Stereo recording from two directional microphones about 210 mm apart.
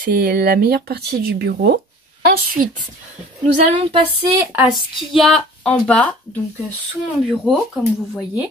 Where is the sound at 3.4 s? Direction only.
30° right (ahead or behind).